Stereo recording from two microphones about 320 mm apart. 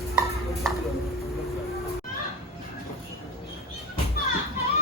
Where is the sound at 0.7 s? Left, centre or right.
Centre.